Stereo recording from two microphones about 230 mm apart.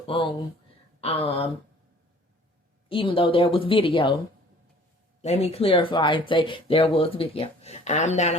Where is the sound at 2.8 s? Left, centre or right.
Left.